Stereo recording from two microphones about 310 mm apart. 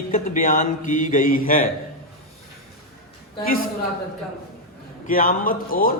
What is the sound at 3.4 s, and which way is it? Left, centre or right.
Speech, left.